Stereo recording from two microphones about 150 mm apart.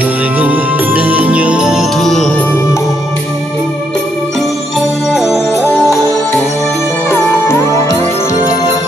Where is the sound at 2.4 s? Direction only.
15° left (ahead or behind).